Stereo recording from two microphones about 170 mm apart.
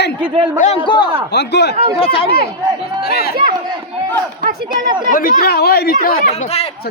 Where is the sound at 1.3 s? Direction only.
80° left.